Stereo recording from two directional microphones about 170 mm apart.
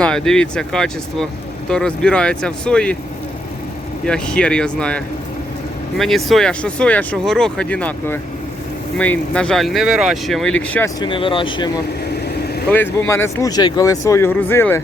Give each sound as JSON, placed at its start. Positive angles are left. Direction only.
{"t": 0.0, "sound": "speech", "side_deg": 5}
{"t": 4.0, "sound": "speech", "side_deg": 5}
{"t": 10.8, "sound": "speech", "side_deg": 25}
{"t": 12.7, "sound": "speech", "side_deg": 10}